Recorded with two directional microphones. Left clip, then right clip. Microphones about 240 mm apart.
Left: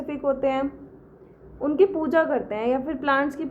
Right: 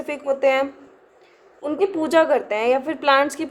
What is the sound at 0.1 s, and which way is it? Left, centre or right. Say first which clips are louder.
Speech: right 5 dB; right.